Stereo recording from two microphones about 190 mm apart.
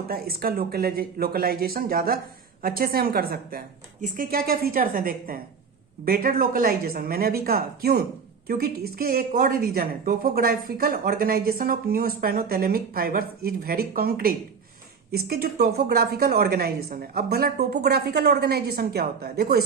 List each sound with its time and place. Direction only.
0.1 s a woman's voice: 50° right (ahead or behind)